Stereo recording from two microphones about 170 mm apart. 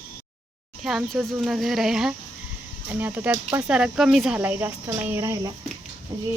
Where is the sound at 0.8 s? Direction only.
Centre (ahead or behind).